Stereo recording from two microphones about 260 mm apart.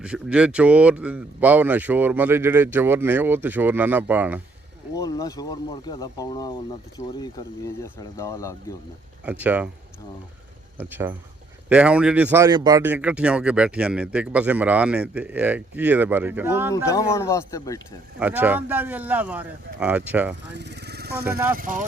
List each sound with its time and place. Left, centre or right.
0.0 s speech: centre
4.9 s speech: centre
9.2 s speech: centre
10.8 s speech: centre
16.7 s speech: centre
18.2 s speech: centre
20.5 s speech: right